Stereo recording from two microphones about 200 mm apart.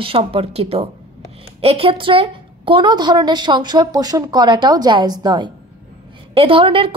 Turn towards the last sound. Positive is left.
turn(degrees=-25)  # may be behind; listen again after turning